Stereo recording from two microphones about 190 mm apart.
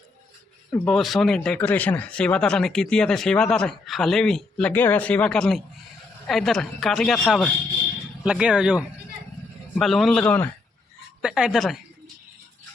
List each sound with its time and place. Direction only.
0.7 s speech: centre (ahead or behind)
11.2 s speech: 5° right (ahead or behind)